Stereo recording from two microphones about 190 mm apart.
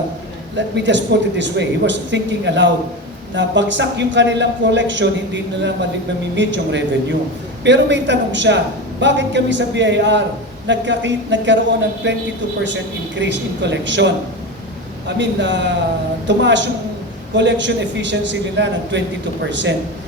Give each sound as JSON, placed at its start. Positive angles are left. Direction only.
{"t": 0.5, "sound": "a man's voice", "side_deg": -70}